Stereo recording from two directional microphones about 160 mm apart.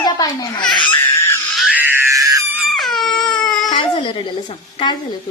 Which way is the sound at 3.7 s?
30° left (ahead or behind).